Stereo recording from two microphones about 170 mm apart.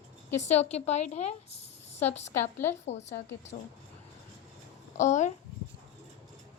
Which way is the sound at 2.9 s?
90° left.